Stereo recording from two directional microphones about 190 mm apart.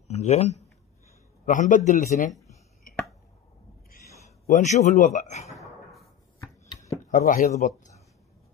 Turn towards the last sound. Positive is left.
turn(degrees=45)  # may be behind; listen again after turning